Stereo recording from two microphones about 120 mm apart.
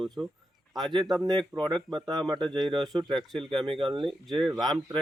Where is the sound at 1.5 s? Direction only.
40° right (ahead or behind).